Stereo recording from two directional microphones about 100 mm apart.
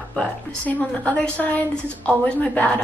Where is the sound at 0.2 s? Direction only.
15° left (ahead or behind).